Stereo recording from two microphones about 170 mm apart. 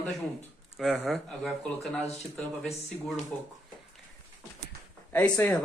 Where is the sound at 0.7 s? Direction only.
Centre (ahead or behind).